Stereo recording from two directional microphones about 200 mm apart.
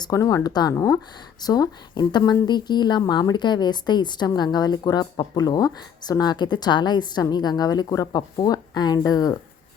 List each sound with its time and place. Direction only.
0.0 s a woman's voice: 15° left (ahead or behind)